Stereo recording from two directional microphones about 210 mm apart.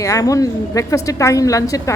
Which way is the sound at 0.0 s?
15° left (ahead or behind).